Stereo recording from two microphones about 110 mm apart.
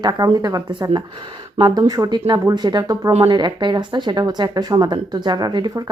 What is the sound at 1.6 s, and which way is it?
Speech, 45° right (ahead or behind).